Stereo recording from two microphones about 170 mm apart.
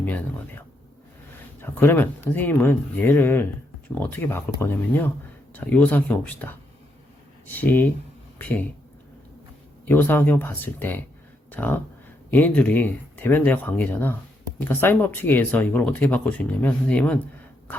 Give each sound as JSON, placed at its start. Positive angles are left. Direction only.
{"t": 0.0, "sound": "speech", "side_deg": 10}
{"t": 9.8, "sound": "speech", "side_deg": 10}